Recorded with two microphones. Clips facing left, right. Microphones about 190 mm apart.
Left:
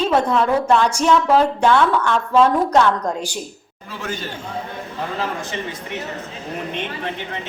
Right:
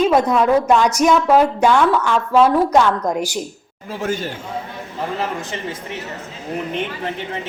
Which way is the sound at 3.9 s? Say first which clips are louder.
Right 6 dB; 45° right (ahead or behind).